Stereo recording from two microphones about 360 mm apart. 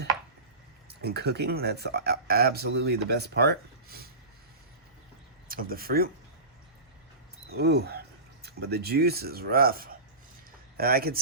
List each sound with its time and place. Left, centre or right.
0.9 s speech: right
5.5 s speech: right
7.5 s speech: right